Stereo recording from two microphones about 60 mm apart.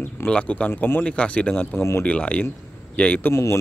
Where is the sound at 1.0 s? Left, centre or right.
Left.